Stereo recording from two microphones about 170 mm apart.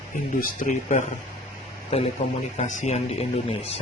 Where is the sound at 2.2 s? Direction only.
35° left (ahead or behind).